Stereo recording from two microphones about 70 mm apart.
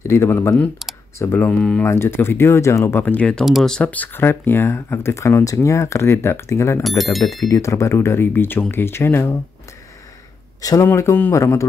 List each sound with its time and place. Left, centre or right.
0.0 s speech: left
1.6 s speech: centre
1.9 s speech: left
3.0 s speech: left
6.8 s speech: centre
7.3 s speech: left
10.6 s speech: left
11.3 s speech: left